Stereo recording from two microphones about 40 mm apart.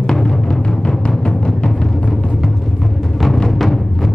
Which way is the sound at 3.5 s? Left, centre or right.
Centre.